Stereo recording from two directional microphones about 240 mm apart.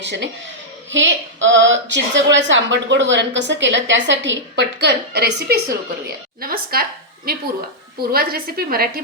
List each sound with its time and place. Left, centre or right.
0.0 s a woman's voice: right
8.1 s a woman's voice: right